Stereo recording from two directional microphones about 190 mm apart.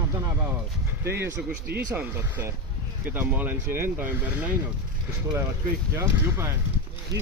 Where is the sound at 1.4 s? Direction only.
5° right (ahead or behind).